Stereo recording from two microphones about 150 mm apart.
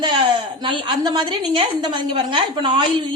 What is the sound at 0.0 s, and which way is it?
A woman's voice, 30° right (ahead or behind).